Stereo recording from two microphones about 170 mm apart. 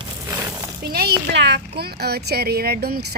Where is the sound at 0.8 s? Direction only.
65° right (ahead or behind).